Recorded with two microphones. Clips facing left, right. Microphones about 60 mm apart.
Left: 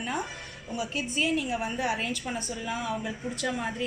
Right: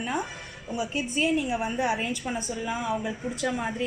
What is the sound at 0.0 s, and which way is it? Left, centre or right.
A woman's voice, centre.